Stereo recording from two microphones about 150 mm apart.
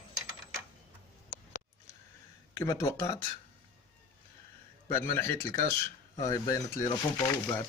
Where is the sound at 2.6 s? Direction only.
20° left (ahead or behind).